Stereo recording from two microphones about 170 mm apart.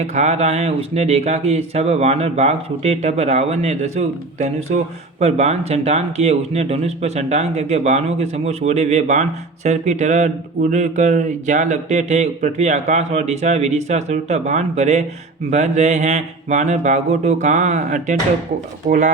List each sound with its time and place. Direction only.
0.0 s speech: 40° right (ahead or behind)